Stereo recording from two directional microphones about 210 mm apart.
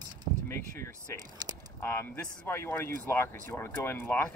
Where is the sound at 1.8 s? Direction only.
10° left (ahead or behind).